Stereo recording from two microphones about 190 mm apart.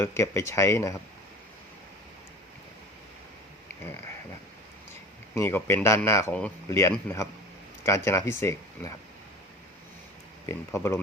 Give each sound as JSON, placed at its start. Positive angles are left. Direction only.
{"t": 0.0, "sound": "speech", "side_deg": 15}
{"t": 5.3, "sound": "speech", "side_deg": 10}
{"t": 10.4, "sound": "speech", "side_deg": 15}